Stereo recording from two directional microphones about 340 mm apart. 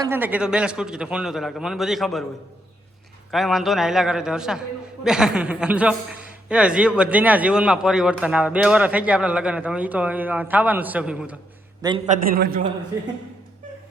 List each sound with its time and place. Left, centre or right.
0.0 s a man's voice: centre
3.3 s a man's voice: centre
11.8 s a man's voice: centre